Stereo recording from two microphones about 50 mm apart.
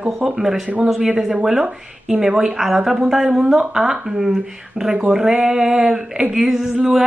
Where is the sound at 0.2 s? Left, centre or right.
Centre.